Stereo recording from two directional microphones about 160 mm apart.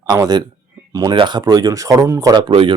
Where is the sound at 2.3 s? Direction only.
30° right (ahead or behind).